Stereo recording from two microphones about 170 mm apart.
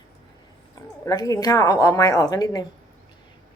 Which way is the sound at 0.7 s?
20° left (ahead or behind).